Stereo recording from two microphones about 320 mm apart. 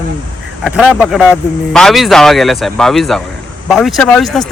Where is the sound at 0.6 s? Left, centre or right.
Centre.